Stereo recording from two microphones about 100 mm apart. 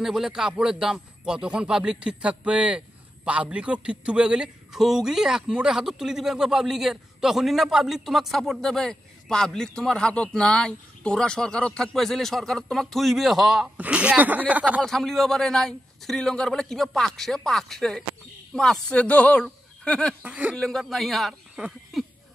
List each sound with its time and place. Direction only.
0.0 s a man's voice: 5° right (ahead or behind)
13.7 s speech: 10° right (ahead or behind)
14.8 s a man's voice: 5° left (ahead or behind)
20.2 s speech: 15° right (ahead or behind)
20.5 s a man's voice: 5° left (ahead or behind)